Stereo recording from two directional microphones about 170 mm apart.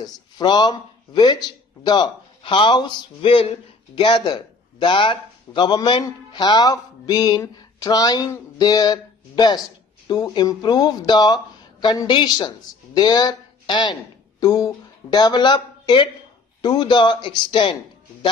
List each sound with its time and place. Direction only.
0.0 s speech: 25° left (ahead or behind)